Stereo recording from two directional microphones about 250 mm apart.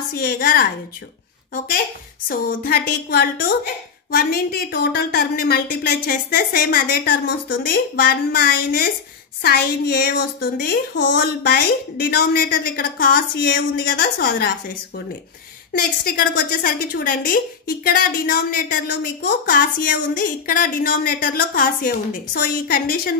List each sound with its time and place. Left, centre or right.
0.1 s a woman's voice: left
2.2 s a woman's voice: left